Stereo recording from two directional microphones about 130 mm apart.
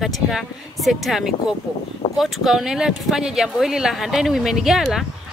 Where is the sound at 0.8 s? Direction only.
Centre (ahead or behind).